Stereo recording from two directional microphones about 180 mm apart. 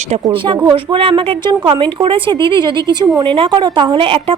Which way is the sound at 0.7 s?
30° right (ahead or behind).